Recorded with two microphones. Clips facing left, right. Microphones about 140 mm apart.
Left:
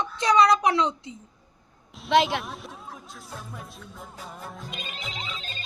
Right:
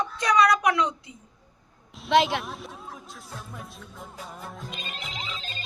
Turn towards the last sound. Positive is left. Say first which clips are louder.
# even
turn(degrees=0)  # may be behind; listen again after turning